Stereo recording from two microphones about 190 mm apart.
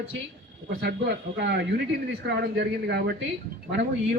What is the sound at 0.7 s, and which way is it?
A man's voice, 55° right (ahead or behind).